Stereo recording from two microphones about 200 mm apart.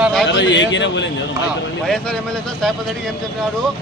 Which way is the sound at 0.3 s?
65° left (ahead or behind).